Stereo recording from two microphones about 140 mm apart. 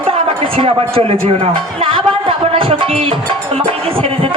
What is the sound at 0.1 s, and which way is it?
Speech, 40° right (ahead or behind).